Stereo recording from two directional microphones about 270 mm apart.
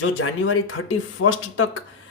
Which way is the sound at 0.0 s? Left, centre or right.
Left.